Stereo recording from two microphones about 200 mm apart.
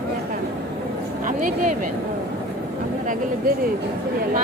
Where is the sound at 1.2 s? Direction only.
40° right (ahead or behind).